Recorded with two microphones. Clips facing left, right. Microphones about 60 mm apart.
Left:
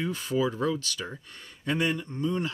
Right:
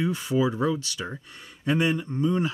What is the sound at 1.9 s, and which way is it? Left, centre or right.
Speech, right.